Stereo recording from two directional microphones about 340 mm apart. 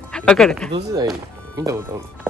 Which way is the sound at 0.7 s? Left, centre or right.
Centre.